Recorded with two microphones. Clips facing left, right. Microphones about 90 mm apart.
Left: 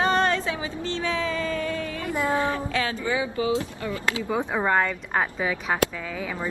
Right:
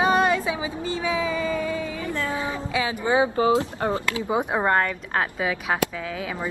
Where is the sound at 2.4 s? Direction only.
10° right (ahead or behind).